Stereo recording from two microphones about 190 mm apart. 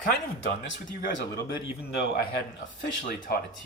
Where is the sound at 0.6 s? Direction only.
65° left (ahead or behind).